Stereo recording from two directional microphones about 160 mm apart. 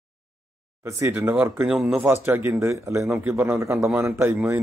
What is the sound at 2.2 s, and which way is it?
Speech, 15° right (ahead or behind).